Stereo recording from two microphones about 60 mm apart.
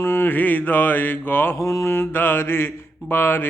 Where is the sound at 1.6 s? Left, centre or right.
Left.